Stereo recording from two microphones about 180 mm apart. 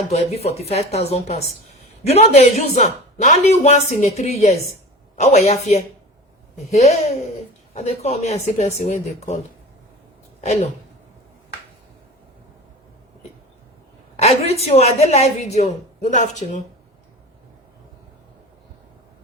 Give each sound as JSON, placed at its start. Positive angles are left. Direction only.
{"t": 0.1, "sound": "a woman's voice", "side_deg": 35}
{"t": 10.4, "sound": "a woman's voice", "side_deg": 40}
{"t": 14.2, "sound": "a woman's voice", "side_deg": 35}